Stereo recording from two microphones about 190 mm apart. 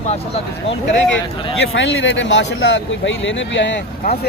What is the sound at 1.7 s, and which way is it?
Speech, 90° left.